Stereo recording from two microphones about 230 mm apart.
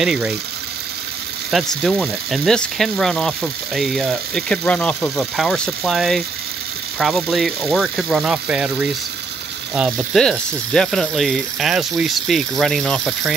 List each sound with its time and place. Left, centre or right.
0.0 s frying: centre
1.8 s frying: centre